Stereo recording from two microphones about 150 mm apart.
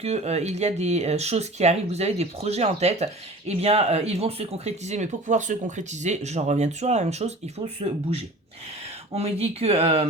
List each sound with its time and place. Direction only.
0.0 s speech: 45° right (ahead or behind)